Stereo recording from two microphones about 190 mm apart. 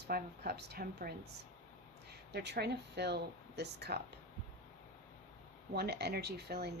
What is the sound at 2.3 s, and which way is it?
Speech, 60° right (ahead or behind).